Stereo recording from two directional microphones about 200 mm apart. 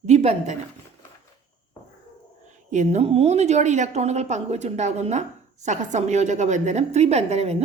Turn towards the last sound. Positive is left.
turn(degrees=-35)  # may be behind; listen again after turning